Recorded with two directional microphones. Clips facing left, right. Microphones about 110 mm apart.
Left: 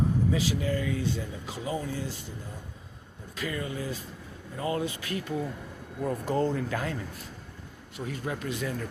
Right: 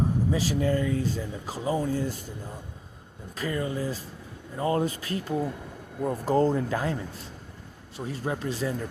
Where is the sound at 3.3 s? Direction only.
35° right (ahead or behind).